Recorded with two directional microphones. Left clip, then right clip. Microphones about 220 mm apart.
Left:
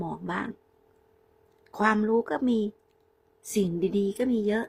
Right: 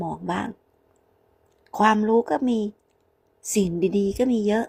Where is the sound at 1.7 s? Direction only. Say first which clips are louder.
Right 5 dB; 10° right (ahead or behind).